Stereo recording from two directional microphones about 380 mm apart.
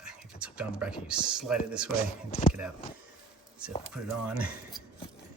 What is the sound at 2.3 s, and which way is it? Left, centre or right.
Speech, centre.